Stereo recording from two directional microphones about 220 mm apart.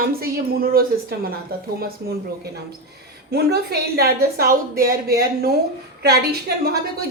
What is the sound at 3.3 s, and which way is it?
A woman's voice, 45° right (ahead or behind).